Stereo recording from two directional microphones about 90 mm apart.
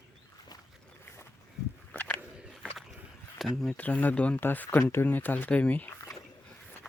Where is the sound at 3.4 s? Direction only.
Centre (ahead or behind).